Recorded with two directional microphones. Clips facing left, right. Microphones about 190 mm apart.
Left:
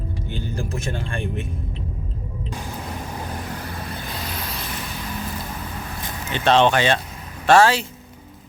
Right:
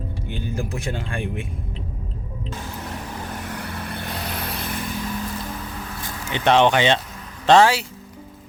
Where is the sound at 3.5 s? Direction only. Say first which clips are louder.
Right 1 dB; 65° right (ahead or behind).